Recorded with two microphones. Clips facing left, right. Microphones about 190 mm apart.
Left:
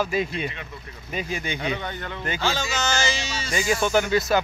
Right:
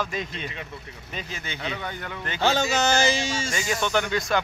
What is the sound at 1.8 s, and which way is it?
Speech, 10° right (ahead or behind).